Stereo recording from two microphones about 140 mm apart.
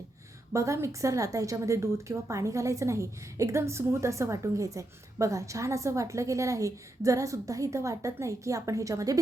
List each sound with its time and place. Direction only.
0.5 s a woman's voice: 20° right (ahead or behind)